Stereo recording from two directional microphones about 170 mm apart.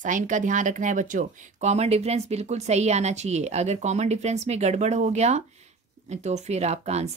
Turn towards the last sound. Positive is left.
turn(degrees=-40)  # may be behind; listen again after turning